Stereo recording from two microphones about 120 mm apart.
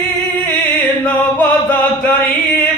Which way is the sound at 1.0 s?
15° left (ahead or behind).